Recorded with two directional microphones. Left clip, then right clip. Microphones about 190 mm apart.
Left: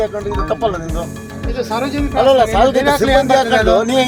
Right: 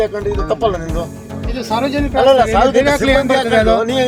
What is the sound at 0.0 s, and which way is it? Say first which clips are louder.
Speech: right 1 dB; centre (ahead or behind).